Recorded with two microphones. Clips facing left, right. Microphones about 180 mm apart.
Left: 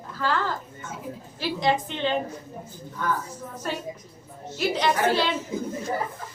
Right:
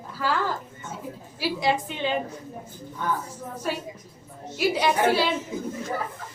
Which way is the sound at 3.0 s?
20° right (ahead or behind).